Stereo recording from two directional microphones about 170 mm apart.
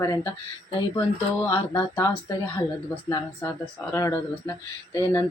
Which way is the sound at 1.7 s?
20° left (ahead or behind).